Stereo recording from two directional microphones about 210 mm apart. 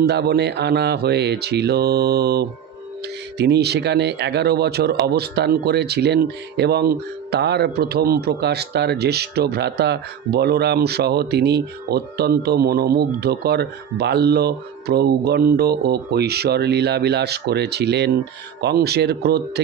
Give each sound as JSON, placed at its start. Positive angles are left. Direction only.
{"t": 0.0, "sound": "speech", "side_deg": -50}